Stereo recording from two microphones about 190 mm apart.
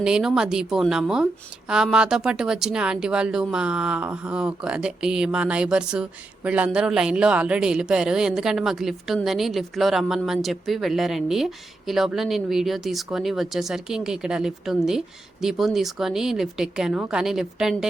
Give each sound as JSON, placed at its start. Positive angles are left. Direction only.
{"t": 0.0, "sound": "a woman's voice", "side_deg": -5}